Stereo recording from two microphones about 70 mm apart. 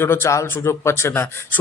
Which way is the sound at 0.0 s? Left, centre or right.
Left.